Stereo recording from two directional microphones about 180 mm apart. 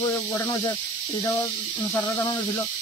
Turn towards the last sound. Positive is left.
turn(degrees=10)  # may be behind; listen again after turning